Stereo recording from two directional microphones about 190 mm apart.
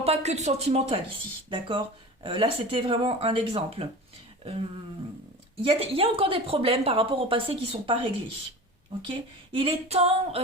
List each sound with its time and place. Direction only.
0.0 s speech: 35° right (ahead or behind)
5.6 s speech: 30° right (ahead or behind)
9.0 s speech: 30° right (ahead or behind)